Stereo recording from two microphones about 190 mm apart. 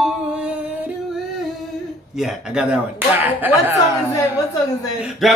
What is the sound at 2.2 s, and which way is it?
Music, 5° right (ahead or behind).